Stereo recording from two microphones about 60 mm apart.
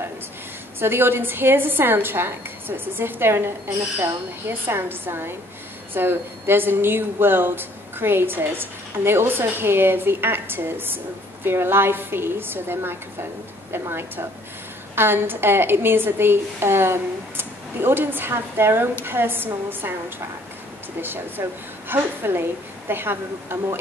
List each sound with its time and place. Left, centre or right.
0.7 s speech: right
21.4 s speech: right